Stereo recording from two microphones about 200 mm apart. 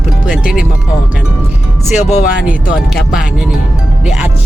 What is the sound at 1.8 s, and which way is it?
Speech, 35° left (ahead or behind).